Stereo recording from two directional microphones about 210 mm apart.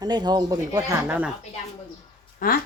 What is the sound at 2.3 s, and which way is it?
Speech, 45° left (ahead or behind).